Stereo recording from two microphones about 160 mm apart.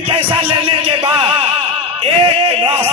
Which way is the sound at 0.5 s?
30° right (ahead or behind).